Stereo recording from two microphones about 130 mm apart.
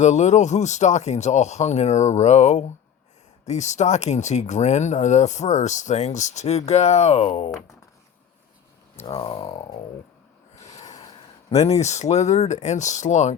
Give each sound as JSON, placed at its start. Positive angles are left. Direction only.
{"t": 0.0, "sound": "speech", "side_deg": 65}
{"t": 9.0, "sound": "speech", "side_deg": 45}
{"t": 10.7, "sound": "snort", "side_deg": 30}
{"t": 11.5, "sound": "speech", "side_deg": 55}